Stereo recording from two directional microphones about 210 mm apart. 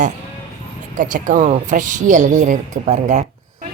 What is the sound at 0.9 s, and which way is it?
Speech, 40° right (ahead or behind).